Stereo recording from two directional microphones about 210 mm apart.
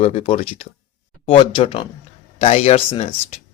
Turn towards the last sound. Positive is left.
turn(degrees=30)  # may be behind; listen again after turning